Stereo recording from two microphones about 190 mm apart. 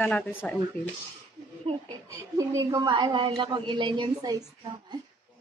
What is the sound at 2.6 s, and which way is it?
A woman's voice, 15° right (ahead or behind).